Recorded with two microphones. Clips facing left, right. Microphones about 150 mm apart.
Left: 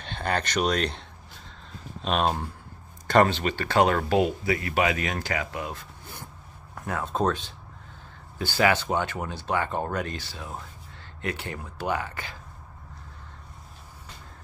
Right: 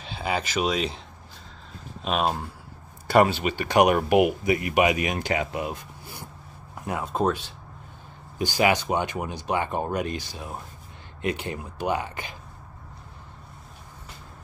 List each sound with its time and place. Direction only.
0.0 s speech: 5° right (ahead or behind)
2.0 s speech: 5° right (ahead or behind)